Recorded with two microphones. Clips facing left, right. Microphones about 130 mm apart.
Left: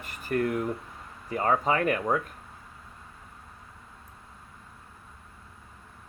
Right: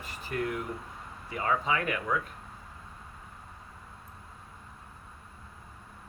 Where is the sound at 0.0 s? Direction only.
50° left (ahead or behind).